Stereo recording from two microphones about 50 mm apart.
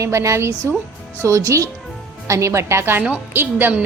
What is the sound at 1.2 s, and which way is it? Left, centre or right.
A woman's voice, right.